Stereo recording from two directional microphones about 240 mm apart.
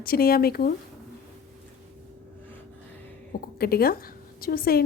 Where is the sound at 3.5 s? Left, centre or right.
Left.